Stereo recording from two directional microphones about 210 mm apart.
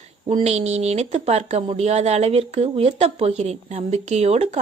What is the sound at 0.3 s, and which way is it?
A woman's voice, 30° right (ahead or behind).